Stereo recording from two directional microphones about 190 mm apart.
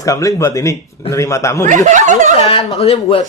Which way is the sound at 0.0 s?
15° left (ahead or behind).